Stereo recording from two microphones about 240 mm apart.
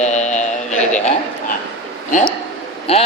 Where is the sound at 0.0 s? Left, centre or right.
Left.